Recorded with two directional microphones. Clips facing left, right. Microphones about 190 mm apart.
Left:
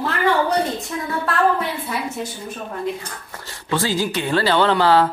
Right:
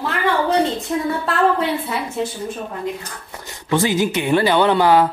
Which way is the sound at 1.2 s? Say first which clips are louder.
Left 1 dB; 25° right (ahead or behind).